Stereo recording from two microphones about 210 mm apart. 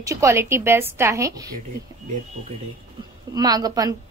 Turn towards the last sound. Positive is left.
turn(degrees=-15)  # may be behind; listen again after turning